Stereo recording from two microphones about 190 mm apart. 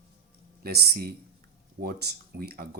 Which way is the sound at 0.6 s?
55° right (ahead or behind).